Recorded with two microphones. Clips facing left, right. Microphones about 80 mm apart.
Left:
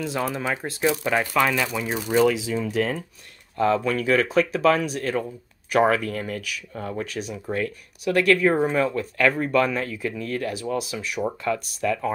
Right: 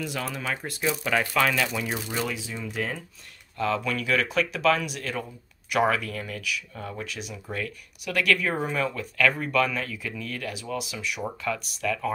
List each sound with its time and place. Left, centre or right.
0.0 s speech: left
2.0 s speech: left
3.5 s speech: left